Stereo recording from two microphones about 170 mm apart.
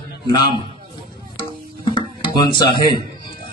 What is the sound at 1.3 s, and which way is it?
Music, 30° left (ahead or behind).